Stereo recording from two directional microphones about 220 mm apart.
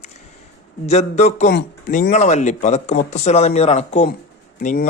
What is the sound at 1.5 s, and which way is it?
Speech, 40° left (ahead or behind).